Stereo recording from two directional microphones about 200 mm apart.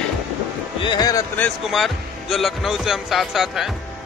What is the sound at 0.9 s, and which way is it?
Speech, 20° left (ahead or behind).